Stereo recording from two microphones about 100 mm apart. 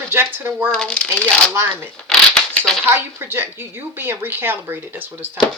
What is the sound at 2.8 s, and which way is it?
Speech, 25° right (ahead or behind).